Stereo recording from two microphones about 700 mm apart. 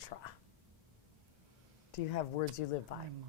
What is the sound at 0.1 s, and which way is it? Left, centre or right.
Whispering, left.